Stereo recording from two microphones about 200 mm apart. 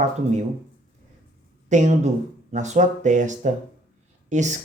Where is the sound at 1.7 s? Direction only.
35° right (ahead or behind).